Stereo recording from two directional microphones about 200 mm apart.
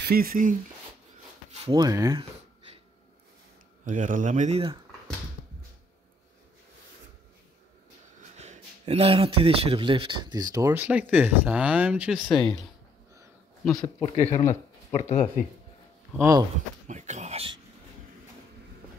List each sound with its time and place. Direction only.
0.0 s speech: 50° right (ahead or behind)
1.5 s speech: 25° right (ahead or behind)
3.8 s speech: 40° right (ahead or behind)
8.4 s speech: 35° right (ahead or behind); by 12.6 s centre (ahead or behind)
13.9 s speech: 30° left (ahead or behind)
16.1 s speech: 15° right (ahead or behind)
16.8 s speech: 35° right (ahead or behind)